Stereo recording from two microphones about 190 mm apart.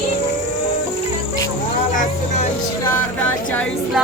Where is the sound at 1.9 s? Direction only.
45° left (ahead or behind).